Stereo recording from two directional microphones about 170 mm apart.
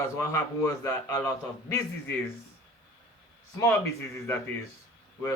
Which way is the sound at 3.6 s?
15° left (ahead or behind).